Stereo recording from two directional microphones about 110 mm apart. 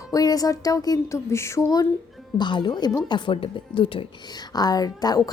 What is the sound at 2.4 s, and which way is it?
A woman's voice, 45° left (ahead or behind).